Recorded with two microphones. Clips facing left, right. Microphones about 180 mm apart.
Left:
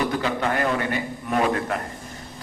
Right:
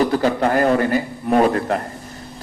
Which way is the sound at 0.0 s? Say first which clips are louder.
Right 7 dB; 40° right (ahead or behind).